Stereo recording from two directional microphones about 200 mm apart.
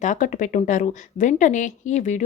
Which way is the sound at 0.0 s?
40° left (ahead or behind).